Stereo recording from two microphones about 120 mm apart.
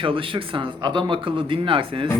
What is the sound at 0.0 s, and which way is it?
Speech, 45° right (ahead or behind).